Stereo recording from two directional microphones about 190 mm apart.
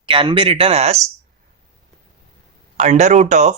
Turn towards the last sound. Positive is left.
turn(degrees=-40)  # may be behind; listen again after turning